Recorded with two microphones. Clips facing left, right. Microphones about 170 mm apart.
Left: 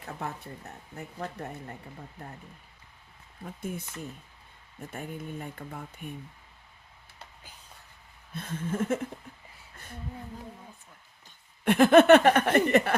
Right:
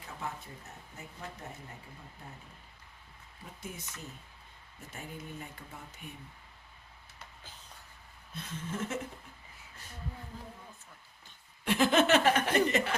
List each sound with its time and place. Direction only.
0.0 s speech: 60° left (ahead or behind)
3.6 s speech: 55° left (ahead or behind)
4.9 s speech: 55° left (ahead or behind)
8.3 s speech: 55° left (ahead or behind)
11.6 s speech: 55° left (ahead or behind)